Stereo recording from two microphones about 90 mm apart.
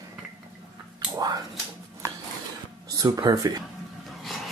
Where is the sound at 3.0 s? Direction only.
45° right (ahead or behind).